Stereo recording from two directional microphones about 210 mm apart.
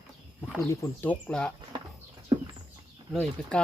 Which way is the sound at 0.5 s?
10° left (ahead or behind).